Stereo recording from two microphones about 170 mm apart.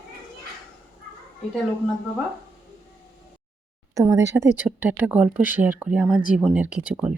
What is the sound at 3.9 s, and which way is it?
Speech, 20° right (ahead or behind).